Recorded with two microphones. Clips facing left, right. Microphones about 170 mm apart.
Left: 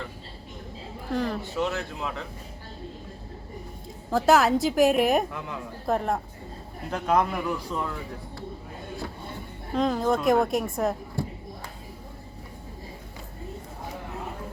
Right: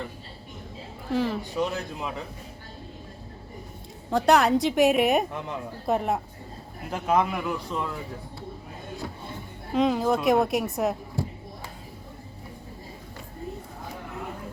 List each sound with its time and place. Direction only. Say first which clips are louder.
1.1 s a woman's voice: right 2 dB; 5° right (ahead or behind)
1.5 s speech: even; 15° right (ahead or behind)
4.1 s a woman's voice: even; centre (ahead or behind)
5.3 s speech: right 2 dB; 20° right (ahead or behind)
5.8 s a woman's voice: even; centre (ahead or behind)
9.7 s a woman's voice: right 1 dB; centre (ahead or behind)